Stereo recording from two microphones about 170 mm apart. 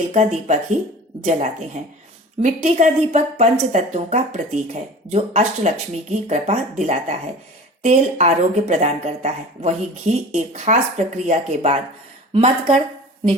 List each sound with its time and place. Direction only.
0.1 s speech: 45° right (ahead or behind)